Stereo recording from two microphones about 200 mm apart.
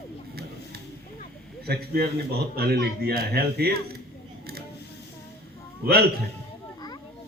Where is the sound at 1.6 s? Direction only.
50° right (ahead or behind).